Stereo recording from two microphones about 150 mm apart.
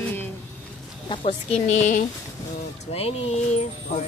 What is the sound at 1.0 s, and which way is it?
Speech, 45° left (ahead or behind).